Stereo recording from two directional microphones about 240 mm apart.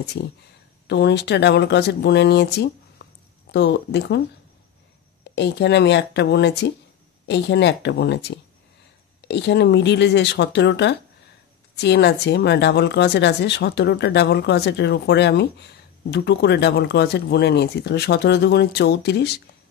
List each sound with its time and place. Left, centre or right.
0.2 s speech: left
3.0 s a sound: left
3.5 s speech: left
5.2 s speech: left